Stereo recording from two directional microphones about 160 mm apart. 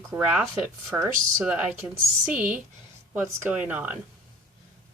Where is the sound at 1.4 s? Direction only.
5° right (ahead or behind).